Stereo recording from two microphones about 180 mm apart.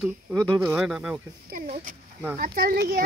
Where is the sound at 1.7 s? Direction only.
45° right (ahead or behind).